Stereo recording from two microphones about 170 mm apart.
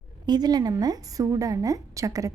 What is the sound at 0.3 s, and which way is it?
A woman's voice, 25° right (ahead or behind).